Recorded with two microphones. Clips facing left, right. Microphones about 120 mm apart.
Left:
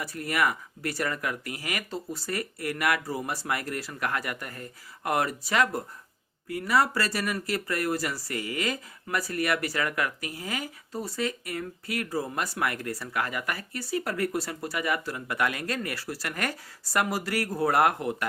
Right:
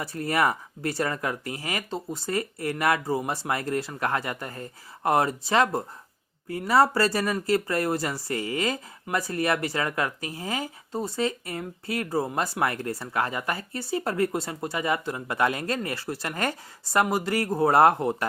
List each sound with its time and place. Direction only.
0.0 s speech: 30° right (ahead or behind)